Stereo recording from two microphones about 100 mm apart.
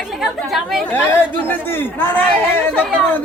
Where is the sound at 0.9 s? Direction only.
20° left (ahead or behind).